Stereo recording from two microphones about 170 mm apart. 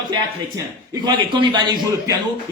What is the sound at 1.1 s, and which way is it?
Speech, 25° right (ahead or behind).